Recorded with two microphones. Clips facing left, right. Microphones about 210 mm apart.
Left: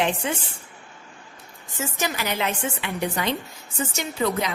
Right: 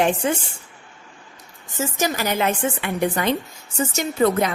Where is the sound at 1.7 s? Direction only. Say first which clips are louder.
Right 5 dB; 40° right (ahead or behind).